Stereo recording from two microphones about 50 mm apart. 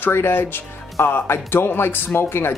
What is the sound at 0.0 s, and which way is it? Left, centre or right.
Speech, left.